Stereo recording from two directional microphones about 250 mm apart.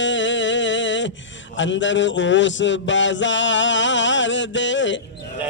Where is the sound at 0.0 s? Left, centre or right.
Left.